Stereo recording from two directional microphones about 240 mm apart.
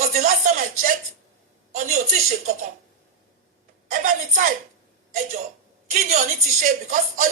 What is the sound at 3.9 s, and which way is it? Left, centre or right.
Speech, right.